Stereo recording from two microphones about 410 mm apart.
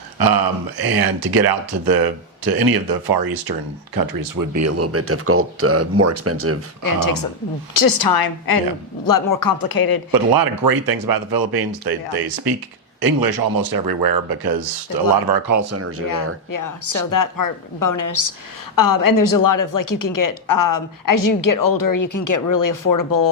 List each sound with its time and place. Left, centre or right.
0.2 s speech: right
6.8 s a woman's voice: left
10.1 s speech: right
15.3 s speech: right
16.5 s a woman's voice: left